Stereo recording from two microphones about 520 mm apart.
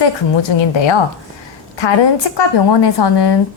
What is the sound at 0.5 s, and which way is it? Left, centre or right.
Speech, left.